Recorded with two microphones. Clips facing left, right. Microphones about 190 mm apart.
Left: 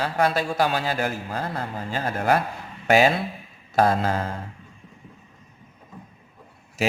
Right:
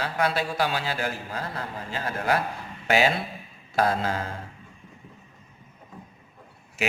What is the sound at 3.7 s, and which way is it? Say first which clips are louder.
Speech: left 4 dB; 45° left (ahead or behind).